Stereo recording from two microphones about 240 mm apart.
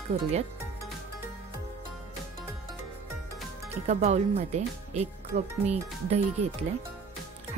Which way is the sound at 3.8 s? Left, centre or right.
Right.